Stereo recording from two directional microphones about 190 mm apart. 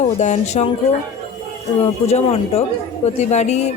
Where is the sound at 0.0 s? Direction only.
40° left (ahead or behind).